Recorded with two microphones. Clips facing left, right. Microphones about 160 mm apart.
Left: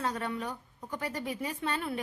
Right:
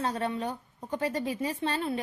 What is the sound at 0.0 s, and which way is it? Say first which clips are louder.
A woman's voice: right 3 dB; 30° right (ahead or behind).